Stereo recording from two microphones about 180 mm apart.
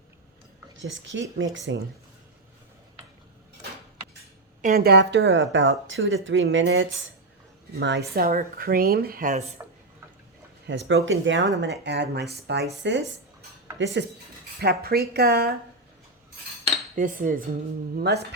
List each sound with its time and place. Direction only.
0.8 s speech: 90° right
4.6 s speech: 55° right (ahead or behind); by 6.8 s 90° right
7.8 s speech: 75° right (ahead or behind); by 9.5 s 45° right (ahead or behind)
10.7 s speech: 85° right
11.6 s speech: 75° right (ahead or behind)
12.8 s speech: 75° right (ahead or behind)
14.6 s speech: 60° right (ahead or behind)
16.9 s cutlery: 45° right (ahead or behind)
17.9 s speech: 65° right (ahead or behind)